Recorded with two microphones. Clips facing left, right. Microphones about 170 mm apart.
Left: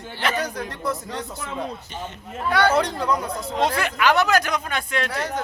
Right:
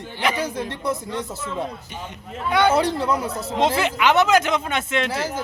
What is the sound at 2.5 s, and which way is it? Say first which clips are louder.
Speech: right 1 dB; 20° right (ahead or behind).